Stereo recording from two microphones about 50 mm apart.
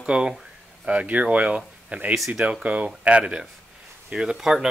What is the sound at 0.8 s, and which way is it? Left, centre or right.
Speech, right.